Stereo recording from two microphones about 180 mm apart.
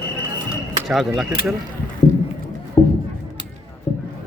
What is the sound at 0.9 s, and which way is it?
Speech, centre (ahead or behind).